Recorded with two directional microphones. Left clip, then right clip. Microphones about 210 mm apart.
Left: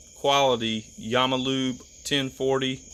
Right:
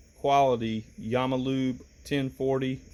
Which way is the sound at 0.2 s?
Centre (ahead or behind).